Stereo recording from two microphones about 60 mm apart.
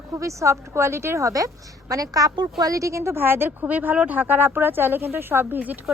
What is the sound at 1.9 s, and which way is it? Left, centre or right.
A woman's voice, right.